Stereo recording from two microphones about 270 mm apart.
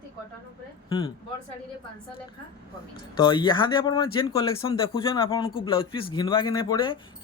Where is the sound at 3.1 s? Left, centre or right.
Centre.